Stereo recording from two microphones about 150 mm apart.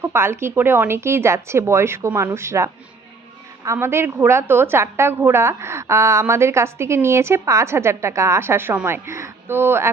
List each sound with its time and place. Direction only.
0.0 s a woman's voice: 15° right (ahead or behind)